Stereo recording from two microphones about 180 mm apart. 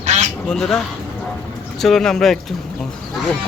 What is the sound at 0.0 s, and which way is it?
Duck, 40° right (ahead or behind).